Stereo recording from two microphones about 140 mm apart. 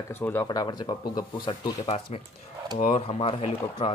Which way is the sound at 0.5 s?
30° left (ahead or behind).